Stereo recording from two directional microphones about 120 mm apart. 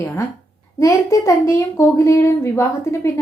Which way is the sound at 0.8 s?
25° left (ahead or behind).